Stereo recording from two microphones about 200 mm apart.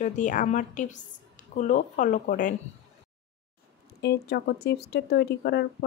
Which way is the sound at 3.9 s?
55° left (ahead or behind).